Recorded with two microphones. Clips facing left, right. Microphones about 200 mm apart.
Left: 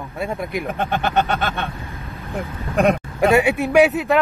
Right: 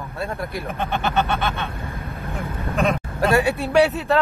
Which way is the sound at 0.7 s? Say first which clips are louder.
Left 1 dB; 50° left (ahead or behind).